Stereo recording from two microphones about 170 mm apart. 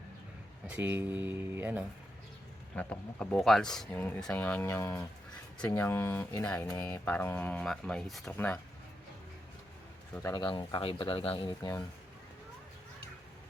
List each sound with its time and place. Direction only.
0.7 s speech: 10° right (ahead or behind)
2.7 s speech: 10° left (ahead or behind)
10.2 s speech: 25° left (ahead or behind)